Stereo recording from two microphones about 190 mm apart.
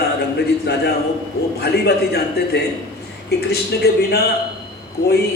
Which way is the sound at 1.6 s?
60° left (ahead or behind).